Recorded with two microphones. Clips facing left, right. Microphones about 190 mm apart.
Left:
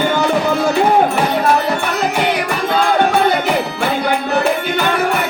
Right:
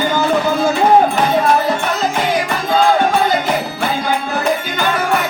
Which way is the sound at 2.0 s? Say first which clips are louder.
Left 1 dB; 65° left (ahead or behind).